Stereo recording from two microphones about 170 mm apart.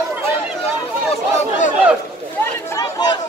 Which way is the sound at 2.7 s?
20° left (ahead or behind).